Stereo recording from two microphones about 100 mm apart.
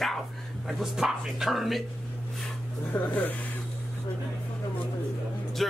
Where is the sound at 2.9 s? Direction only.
15° left (ahead or behind).